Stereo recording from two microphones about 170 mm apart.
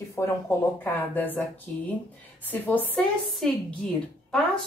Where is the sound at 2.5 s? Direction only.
10° left (ahead or behind).